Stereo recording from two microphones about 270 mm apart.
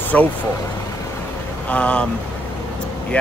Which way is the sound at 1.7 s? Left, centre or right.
Centre.